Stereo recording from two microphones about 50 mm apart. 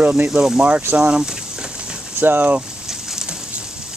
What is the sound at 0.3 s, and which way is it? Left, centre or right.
Speech, centre.